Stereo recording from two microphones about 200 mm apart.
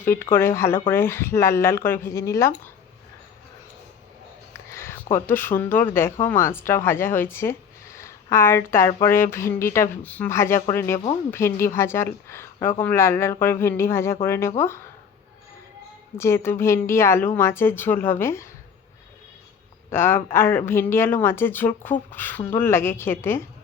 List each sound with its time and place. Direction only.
0.0 s speech: 10° left (ahead or behind)
4.7 s a sound: 15° left (ahead or behind)
5.1 s speech: 10° left (ahead or behind)
16.1 s speech: 15° left (ahead or behind)
19.9 s speech: 10° left (ahead or behind)